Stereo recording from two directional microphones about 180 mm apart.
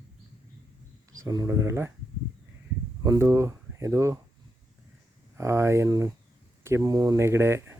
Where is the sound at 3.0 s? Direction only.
15° right (ahead or behind).